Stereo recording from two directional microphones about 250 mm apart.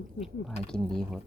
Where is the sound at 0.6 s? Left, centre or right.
Centre.